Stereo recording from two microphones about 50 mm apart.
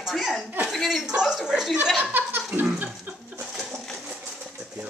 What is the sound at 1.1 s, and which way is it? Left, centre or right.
Speech, centre.